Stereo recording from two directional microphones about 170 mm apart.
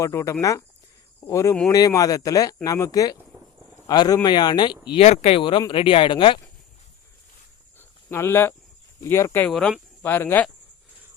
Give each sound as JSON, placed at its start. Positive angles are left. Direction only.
{"t": 0.0, "sound": "speech", "side_deg": 15}
{"t": 7.8, "sound": "cricket", "side_deg": 15}
{"t": 9.0, "sound": "speech", "side_deg": 15}
{"t": 9.5, "sound": "speech", "side_deg": 0}